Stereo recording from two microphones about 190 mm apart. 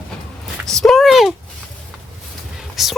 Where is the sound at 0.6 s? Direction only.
Centre (ahead or behind).